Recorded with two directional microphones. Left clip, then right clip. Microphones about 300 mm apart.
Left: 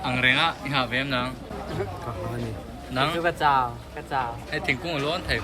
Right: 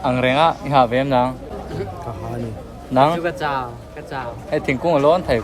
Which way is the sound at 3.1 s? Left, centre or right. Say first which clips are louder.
Even; centre.